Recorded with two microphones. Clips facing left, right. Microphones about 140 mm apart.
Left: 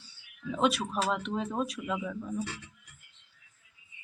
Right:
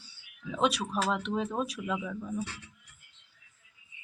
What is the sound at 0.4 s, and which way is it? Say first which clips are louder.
Speech: left 1 dB; centre (ahead or behind).